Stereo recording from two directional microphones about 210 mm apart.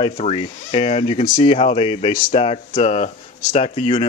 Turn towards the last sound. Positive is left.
turn(degrees=30)  # may be behind; listen again after turning